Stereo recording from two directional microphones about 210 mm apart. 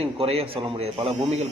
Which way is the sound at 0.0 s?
30° right (ahead or behind).